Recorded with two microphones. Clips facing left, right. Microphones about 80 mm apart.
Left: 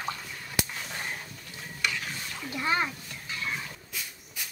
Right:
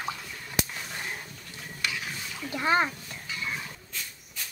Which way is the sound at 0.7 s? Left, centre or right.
Centre.